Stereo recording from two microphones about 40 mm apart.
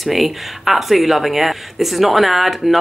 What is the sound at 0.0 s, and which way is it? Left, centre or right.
Speech, centre.